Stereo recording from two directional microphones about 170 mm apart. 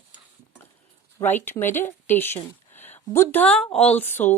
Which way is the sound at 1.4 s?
15° left (ahead or behind).